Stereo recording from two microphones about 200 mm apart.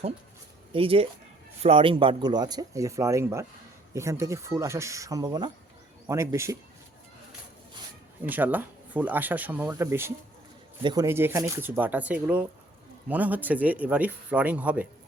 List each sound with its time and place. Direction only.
0.7 s speech: 25° right (ahead or behind)
8.2 s speech: 10° right (ahead or behind)